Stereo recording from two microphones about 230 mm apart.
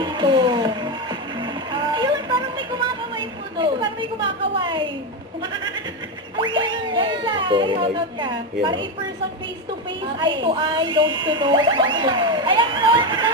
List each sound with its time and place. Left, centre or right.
0.0 s music: centre
1.4 s vehicle: centre
6.3 s children playing: right
10.2 s speech: right